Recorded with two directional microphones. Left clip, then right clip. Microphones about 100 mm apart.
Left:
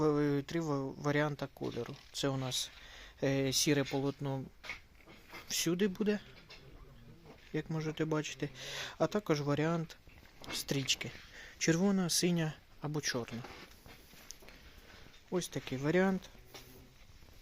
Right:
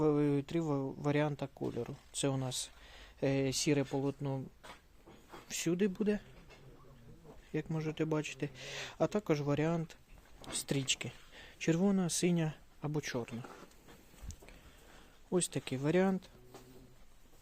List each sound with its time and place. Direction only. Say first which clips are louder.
0.0 s a sound: even; 20° right (ahead or behind)
1.0 s speech: left 1 dB; 25° right (ahead or behind); by 4.4 s centre (ahead or behind)
5.5 s speech: left 1 dB; 5° right (ahead or behind)
7.5 s speech: even; 15° right (ahead or behind)
15.4 s speech: right 2 dB; 50° right (ahead or behind)
15.6 s speech: even; 25° right (ahead or behind)
15.9 s speech: left 1 dB; 10° right (ahead or behind)